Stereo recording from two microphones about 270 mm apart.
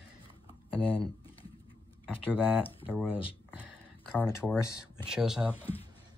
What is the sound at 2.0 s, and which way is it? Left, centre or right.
Speech, centre.